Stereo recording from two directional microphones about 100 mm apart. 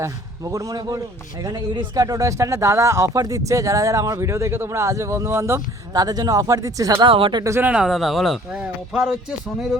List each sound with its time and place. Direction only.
0.0 s speech: 35° right (ahead or behind)
1.5 s speech: 45° right (ahead or behind)
2.0 s speech: 35° right (ahead or behind)
6.9 s speech: 60° right (ahead or behind)
7.6 s speech: 10° right (ahead or behind)